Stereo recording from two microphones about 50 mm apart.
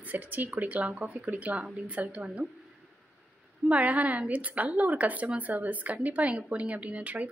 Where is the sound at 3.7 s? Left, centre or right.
Right.